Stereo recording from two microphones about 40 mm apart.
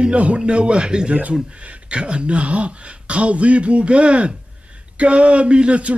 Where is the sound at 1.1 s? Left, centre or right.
Right.